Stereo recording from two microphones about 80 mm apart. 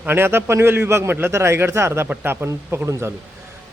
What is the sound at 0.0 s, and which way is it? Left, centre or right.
A man's voice, right.